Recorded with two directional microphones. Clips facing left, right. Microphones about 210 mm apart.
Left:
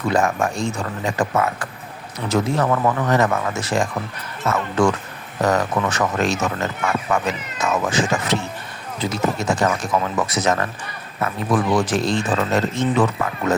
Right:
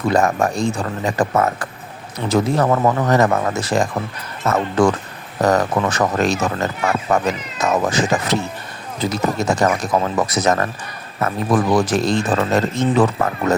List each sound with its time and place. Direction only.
0.1 s speech: 40° right (ahead or behind)